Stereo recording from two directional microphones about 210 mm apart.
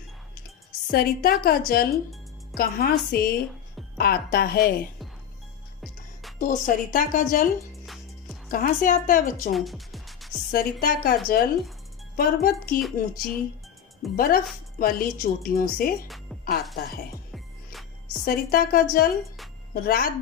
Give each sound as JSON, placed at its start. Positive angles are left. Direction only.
{"t": 0.9, "sound": "a woman's voice", "side_deg": 45}
{"t": 6.4, "sound": "a woman's voice", "side_deg": 40}
{"t": 8.4, "sound": "a woman's voice", "side_deg": 40}
{"t": 9.5, "sound": "music", "side_deg": 0}
{"t": 10.5, "sound": "a woman's voice", "side_deg": 45}
{"t": 12.8, "sound": "speech", "side_deg": 0}
{"t": 14.2, "sound": "a woman's voice", "side_deg": 45}
{"t": 16.0, "sound": "music", "side_deg": 0}
{"t": 18.3, "sound": "a woman's voice", "side_deg": 45}